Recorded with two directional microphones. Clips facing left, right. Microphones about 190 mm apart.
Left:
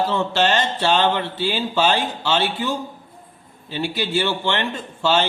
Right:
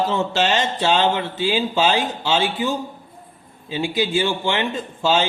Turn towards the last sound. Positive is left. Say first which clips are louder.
# even
turn(degrees=-15)  # may be behind; listen again after turning